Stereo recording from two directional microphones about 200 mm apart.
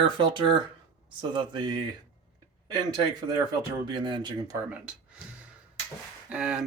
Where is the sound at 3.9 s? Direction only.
25° right (ahead or behind).